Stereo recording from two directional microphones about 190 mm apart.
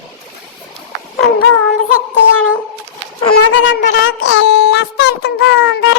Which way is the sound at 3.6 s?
75° left (ahead or behind).